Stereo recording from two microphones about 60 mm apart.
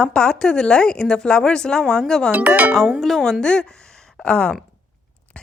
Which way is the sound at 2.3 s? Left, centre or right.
Right.